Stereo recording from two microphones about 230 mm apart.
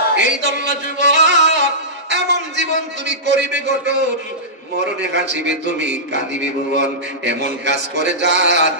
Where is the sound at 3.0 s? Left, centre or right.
Right.